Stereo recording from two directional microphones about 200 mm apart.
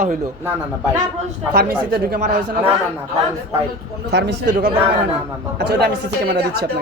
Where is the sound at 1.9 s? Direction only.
50° right (ahead or behind).